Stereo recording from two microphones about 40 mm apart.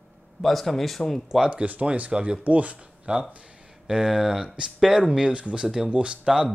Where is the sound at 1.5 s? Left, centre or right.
Right.